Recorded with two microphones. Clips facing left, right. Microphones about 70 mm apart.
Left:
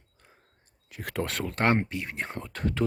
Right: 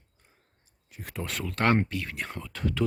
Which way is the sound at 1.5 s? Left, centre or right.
Left.